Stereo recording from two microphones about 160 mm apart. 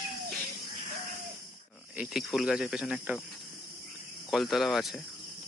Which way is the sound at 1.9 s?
5° right (ahead or behind).